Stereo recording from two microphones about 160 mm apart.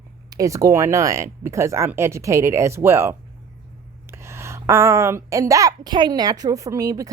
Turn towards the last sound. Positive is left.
turn(degrees=-20)  # may be behind; listen again after turning